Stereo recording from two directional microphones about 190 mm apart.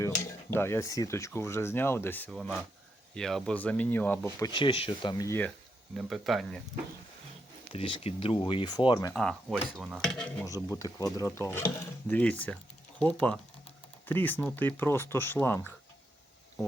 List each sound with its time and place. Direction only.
0.0 s speech: 15° left (ahead or behind)
2.3 s speech: centre (ahead or behind); by 5.5 s 15° left (ahead or behind)
5.9 s speech: 5° right (ahead or behind)
7.7 s speech: 30° left (ahead or behind)
9.1 s speech: 5° left (ahead or behind)
10.4 s speech: 15° left (ahead or behind)